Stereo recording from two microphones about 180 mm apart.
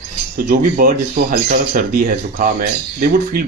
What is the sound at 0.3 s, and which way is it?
Speech, 55° right (ahead or behind).